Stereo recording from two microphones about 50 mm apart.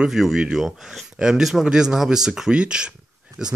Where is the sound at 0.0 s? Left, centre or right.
Centre.